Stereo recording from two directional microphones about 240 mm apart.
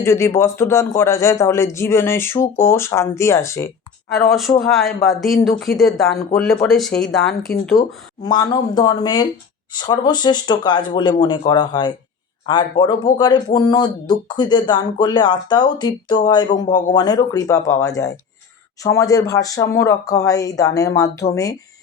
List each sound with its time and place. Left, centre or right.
0.0 s speech: centre
4.3 s speech: centre
8.2 s speech: centre